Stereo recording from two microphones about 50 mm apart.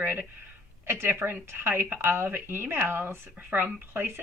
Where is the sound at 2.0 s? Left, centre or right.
Right.